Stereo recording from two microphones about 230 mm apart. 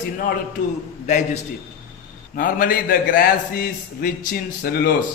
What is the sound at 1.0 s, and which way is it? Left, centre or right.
A man's voice, left.